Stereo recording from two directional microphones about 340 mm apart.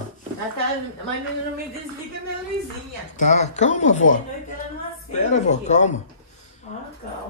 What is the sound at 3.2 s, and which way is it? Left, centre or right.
Speech, left.